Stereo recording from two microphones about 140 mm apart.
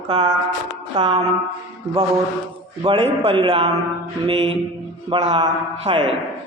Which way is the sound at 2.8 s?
40° right (ahead or behind).